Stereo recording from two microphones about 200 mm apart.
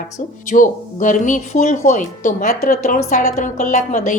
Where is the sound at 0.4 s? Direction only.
40° left (ahead or behind).